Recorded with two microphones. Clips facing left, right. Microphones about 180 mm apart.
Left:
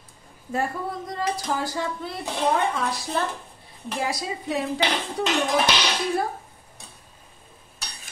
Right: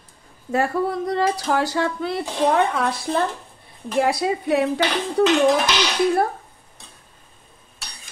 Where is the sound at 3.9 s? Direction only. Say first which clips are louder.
Right 9 dB; 60° right (ahead or behind).